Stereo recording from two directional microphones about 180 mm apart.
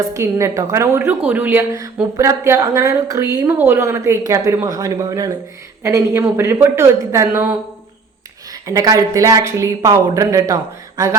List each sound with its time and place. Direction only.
0.0 s a woman's voice: 15° right (ahead or behind)
8.6 s speech: 20° right (ahead or behind)